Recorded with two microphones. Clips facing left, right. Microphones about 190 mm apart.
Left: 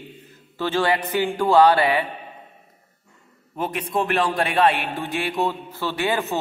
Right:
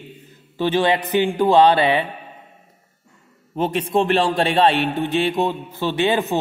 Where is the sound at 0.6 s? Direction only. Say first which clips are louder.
Right 3 dB; 20° right (ahead or behind).